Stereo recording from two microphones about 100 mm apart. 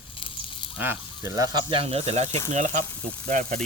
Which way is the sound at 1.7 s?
75° right (ahead or behind).